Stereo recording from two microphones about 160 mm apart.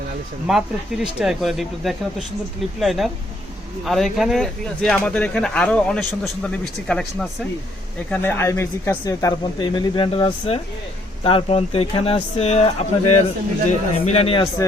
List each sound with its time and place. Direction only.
0.4 s speech: centre (ahead or behind); by 14.4 s 40° left (ahead or behind)